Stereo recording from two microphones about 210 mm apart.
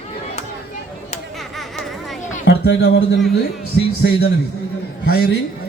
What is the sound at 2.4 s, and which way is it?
A man's voice, 50° left (ahead or behind).